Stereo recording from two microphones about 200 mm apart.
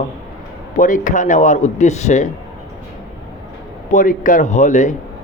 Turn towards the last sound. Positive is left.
turn(degrees=35)  # may be behind; listen again after turning